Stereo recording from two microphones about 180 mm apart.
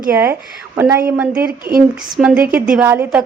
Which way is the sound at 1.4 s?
55° right (ahead or behind).